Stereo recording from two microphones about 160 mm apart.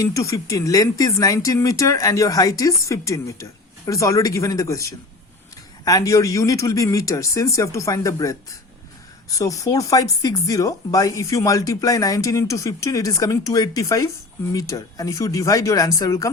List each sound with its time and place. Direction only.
0.0 s speech: 20° left (ahead or behind)